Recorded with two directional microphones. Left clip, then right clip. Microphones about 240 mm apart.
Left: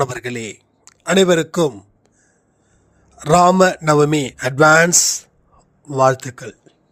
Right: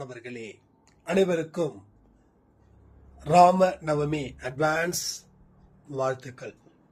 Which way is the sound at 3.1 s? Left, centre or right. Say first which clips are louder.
Left 6 dB; left.